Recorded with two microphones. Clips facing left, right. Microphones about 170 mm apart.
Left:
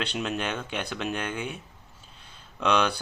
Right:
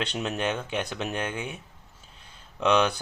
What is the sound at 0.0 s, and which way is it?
Speech, 20° right (ahead or behind).